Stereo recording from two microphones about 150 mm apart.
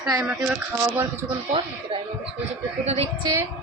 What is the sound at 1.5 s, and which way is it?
A woman's voice, 35° right (ahead or behind).